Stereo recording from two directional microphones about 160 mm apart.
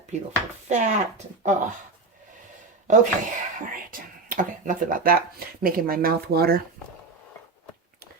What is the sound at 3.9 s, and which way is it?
Speech, 55° right (ahead or behind).